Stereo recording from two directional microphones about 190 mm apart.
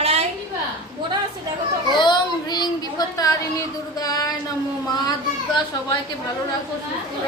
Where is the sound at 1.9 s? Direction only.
25° left (ahead or behind).